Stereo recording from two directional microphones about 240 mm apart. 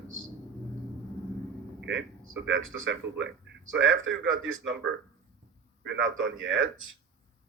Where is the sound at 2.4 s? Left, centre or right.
Right.